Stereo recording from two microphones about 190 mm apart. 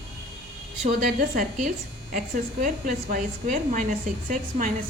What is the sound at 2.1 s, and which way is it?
A woman's voice, 45° right (ahead or behind).